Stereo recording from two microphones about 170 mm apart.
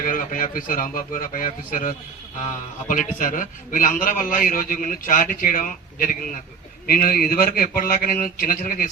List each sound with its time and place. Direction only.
0.0 s a man's voice: 55° left (ahead or behind)